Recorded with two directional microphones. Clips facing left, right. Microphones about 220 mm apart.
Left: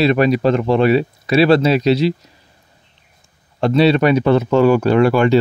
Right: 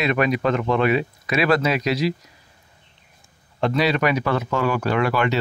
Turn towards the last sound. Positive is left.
turn(degrees=30)  # may be behind; listen again after turning